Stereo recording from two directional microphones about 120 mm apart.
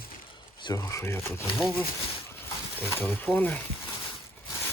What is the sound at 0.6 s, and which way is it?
Speech, 30° left (ahead or behind).